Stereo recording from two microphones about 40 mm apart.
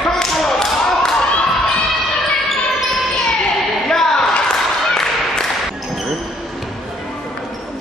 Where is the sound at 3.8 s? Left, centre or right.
Centre.